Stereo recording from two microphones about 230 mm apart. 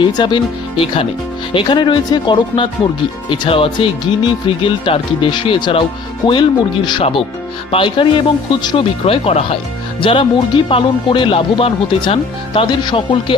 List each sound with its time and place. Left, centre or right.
0.0 s speech: centre